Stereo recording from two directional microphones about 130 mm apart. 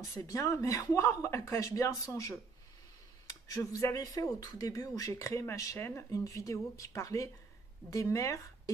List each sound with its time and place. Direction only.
0.0 s speech: 25° left (ahead or behind)